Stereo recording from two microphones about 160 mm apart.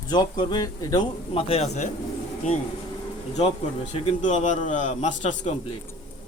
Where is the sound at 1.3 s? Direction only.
35° left (ahead or behind).